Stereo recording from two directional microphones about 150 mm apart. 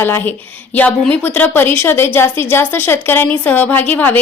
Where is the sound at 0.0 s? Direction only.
15° left (ahead or behind).